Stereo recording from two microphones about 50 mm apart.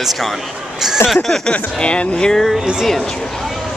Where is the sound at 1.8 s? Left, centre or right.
Left.